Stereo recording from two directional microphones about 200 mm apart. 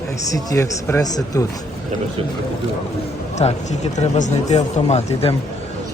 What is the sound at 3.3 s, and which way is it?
Speech, 35° left (ahead or behind).